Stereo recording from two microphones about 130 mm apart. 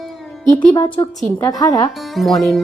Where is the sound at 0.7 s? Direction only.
30° left (ahead or behind).